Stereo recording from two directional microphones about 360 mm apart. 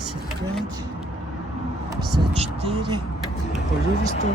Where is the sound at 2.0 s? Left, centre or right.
Centre.